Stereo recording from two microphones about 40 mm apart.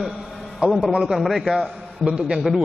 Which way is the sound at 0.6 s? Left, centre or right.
Right.